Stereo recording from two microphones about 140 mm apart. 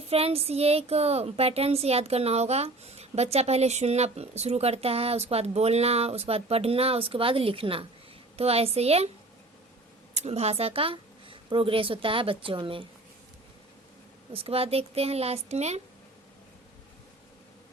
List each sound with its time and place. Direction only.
0.1 s a woman's voice: 45° right (ahead or behind)
10.2 s speech: 50° right (ahead or behind)
14.3 s a woman's voice: 45° right (ahead or behind)